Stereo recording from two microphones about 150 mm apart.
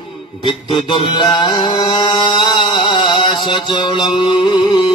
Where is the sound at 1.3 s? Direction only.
30° left (ahead or behind).